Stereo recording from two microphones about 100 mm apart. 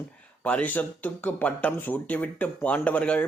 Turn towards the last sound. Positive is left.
turn(degrees=10)  # may be behind; listen again after turning